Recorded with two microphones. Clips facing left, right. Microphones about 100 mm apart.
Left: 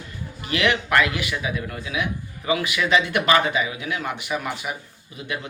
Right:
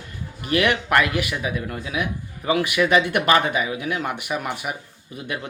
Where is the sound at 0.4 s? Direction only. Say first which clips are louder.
Right 2 dB; 50° right (ahead or behind).